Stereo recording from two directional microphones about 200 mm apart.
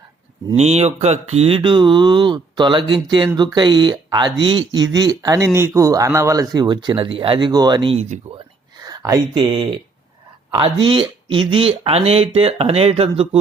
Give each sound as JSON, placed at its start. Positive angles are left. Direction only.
{"t": 0.5, "sound": "speech", "side_deg": -35}
{"t": 8.8, "sound": "speech", "side_deg": -20}
{"t": 10.8, "sound": "speech", "side_deg": -25}